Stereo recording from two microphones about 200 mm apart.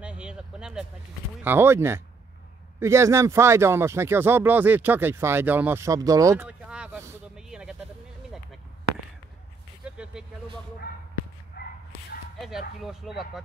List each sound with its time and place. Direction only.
0.0 s a sound: 5° right (ahead or behind)
1.4 s speech: 10° right (ahead or behind)
7.3 s vehicle: 5° right (ahead or behind)
9.8 s vehicle: 5° right (ahead or behind)
11.5 s dog: 50° left (ahead or behind)
12.4 s speech: centre (ahead or behind)